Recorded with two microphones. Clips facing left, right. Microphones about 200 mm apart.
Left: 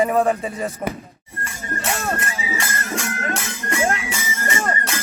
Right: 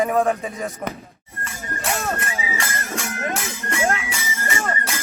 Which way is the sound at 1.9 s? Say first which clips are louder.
Even; centre (ahead or behind).